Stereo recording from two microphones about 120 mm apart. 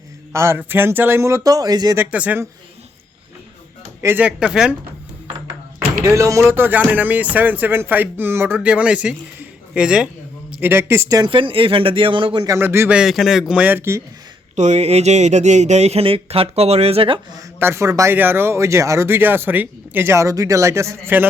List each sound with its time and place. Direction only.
0.3 s speech: 20° right (ahead or behind)
2.0 s speech: 10° right (ahead or behind)
4.0 s speech: 15° right (ahead or behind)
6.0 s speech: 25° right (ahead or behind)
11.2 s speech: 45° right (ahead or behind)
12.5 s speech: 20° right (ahead or behind)
12.9 s a man's voice: 5° right (ahead or behind)
13.5 s speech: 10° right (ahead or behind)
14.5 s speech: 75° right (ahead or behind); by 17.2 s 50° right (ahead or behind)
17.6 s speech: 20° right (ahead or behind)